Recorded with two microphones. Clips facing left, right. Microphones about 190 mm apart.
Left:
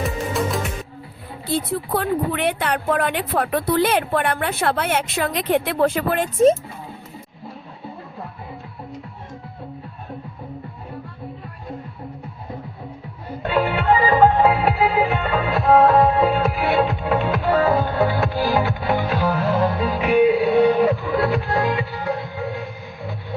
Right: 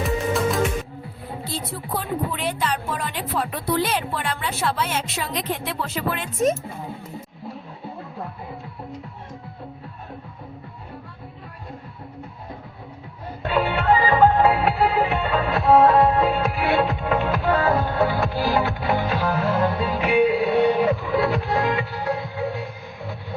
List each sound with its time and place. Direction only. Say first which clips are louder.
0.0 s music: right 1 dB; centre (ahead or behind)
1.5 s a woman's voice: left 9 dB; 60° left (ahead or behind)
13.5 s music: left 1 dB; centre (ahead or behind)